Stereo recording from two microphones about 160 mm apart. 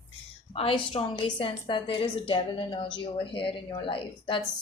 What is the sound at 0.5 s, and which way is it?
A woman's voice, 35° left (ahead or behind).